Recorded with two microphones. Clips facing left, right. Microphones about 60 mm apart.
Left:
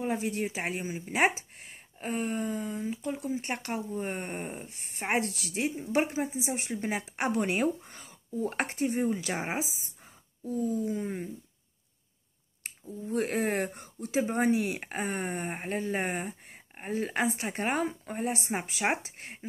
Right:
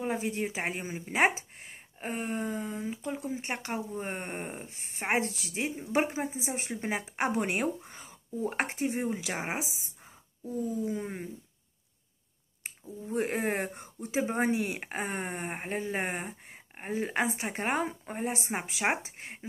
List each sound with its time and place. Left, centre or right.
0.0 s speech: right
9.4 s speech: centre
10.4 s a sound: right
13.1 s speech: right